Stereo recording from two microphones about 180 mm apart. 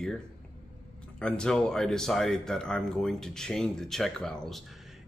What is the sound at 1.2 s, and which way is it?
Speech, 5° left (ahead or behind).